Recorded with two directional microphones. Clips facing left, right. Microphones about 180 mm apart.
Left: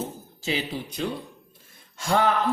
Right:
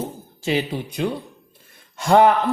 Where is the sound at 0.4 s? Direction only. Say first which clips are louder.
Right 6 dB; 60° right (ahead or behind).